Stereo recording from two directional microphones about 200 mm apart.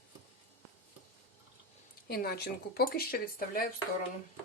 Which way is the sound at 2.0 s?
50° left (ahead or behind).